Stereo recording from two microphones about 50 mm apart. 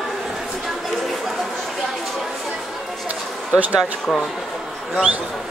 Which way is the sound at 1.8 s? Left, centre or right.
Centre.